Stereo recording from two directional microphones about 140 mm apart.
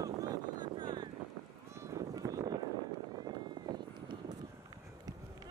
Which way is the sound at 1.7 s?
20° right (ahead or behind).